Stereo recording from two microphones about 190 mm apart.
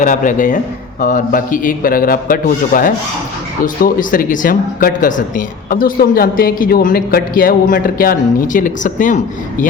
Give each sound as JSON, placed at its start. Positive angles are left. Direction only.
{"t": 0.0, "sound": "a man's voice", "side_deg": 45}